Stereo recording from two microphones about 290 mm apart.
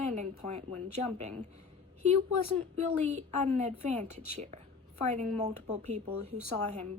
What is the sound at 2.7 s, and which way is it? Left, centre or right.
Speech, right.